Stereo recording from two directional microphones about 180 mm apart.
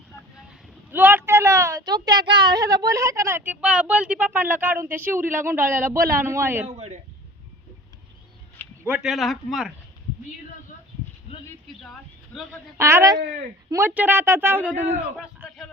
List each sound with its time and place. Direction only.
0.9 s a woman's voice: 10° right (ahead or behind)
6.7 s speech: 35° right (ahead or behind)
8.8 s speech: 5° right (ahead or behind)
11.8 s speech: centre (ahead or behind)
12.7 s a woman's voice: 15° right (ahead or behind)